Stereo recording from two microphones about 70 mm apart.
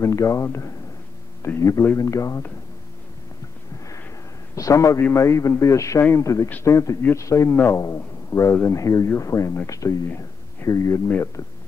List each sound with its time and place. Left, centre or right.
0.0 s a man's voice: left
4.6 s a man's voice: left
10.0 s a sound: left
10.7 s a man's voice: left